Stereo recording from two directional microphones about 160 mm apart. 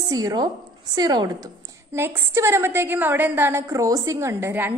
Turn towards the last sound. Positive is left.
turn(degrees=-15)  # may be behind; listen again after turning